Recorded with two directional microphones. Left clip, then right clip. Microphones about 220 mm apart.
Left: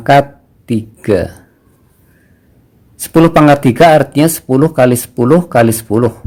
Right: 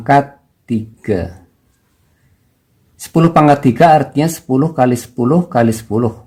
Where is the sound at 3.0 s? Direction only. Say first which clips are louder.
Left 4 dB; 35° left (ahead or behind).